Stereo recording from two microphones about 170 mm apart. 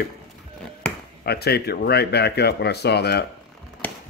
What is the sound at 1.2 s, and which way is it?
Speech, 70° left (ahead or behind).